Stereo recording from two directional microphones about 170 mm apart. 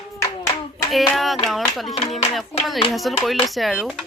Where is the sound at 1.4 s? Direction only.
Centre (ahead or behind).